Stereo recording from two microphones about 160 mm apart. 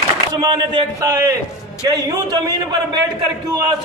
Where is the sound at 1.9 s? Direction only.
25° right (ahead or behind).